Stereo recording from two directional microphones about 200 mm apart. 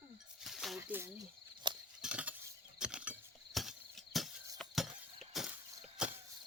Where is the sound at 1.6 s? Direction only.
25° right (ahead or behind).